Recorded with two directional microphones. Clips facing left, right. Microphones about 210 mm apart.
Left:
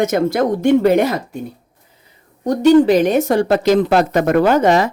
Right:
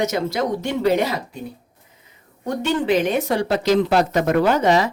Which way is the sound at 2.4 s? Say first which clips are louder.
Left 10 dB; 40° left (ahead or behind).